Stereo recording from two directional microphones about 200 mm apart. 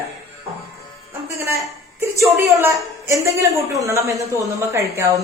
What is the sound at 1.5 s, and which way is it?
A woman's voice, 15° right (ahead or behind).